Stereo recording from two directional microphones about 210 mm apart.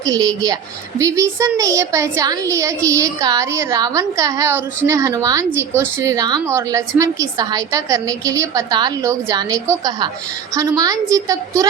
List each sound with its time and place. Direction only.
0.0 s a woman's voice: 15° right (ahead or behind)